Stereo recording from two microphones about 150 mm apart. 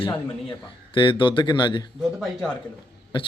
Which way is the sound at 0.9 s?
30° left (ahead or behind).